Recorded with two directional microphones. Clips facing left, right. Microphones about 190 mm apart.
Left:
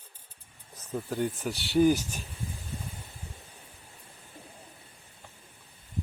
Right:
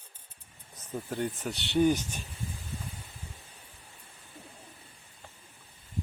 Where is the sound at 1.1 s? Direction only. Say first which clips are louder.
Left 2 dB; centre (ahead or behind).